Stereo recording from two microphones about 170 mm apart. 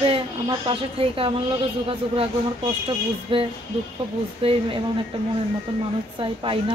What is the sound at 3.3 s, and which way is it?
Speech, 30° right (ahead or behind).